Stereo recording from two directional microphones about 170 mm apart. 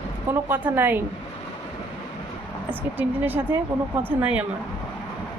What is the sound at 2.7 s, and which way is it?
Speech, 10° right (ahead or behind).